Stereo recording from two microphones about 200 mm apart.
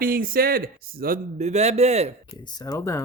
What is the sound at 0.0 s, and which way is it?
Speech, 45° right (ahead or behind).